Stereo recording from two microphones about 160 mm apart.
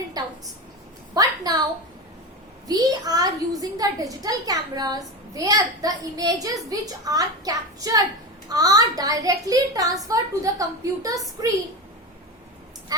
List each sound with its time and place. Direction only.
0.2 s a sound: 25° right (ahead or behind)
2.6 s a woman's voice: 25° right (ahead or behind)
12.9 s a woman's voice: 25° right (ahead or behind)